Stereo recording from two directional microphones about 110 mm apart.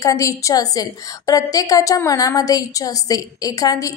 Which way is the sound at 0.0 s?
30° left (ahead or behind).